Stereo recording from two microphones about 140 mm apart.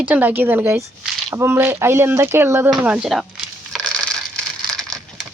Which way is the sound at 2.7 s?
5° right (ahead or behind).